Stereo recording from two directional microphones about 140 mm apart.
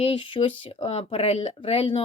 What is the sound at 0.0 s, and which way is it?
Speech, 40° left (ahead or behind).